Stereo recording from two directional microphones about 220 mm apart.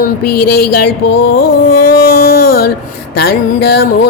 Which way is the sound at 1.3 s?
45° left (ahead or behind).